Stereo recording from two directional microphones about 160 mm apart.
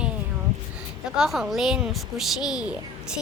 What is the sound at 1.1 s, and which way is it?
Speech, 5° right (ahead or behind).